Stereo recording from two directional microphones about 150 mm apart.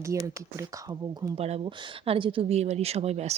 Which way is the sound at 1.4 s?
40° right (ahead or behind).